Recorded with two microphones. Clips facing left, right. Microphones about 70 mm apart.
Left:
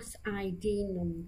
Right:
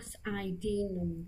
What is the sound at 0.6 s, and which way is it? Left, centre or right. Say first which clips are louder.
Speech: left 1 dB; right.